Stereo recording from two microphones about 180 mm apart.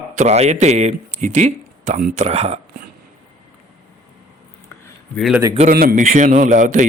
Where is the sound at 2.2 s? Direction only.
35° right (ahead or behind).